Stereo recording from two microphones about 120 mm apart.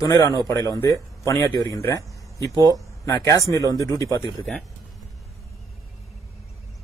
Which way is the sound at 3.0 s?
30° left (ahead or behind).